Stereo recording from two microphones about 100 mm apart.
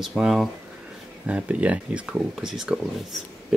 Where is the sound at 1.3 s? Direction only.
15° right (ahead or behind).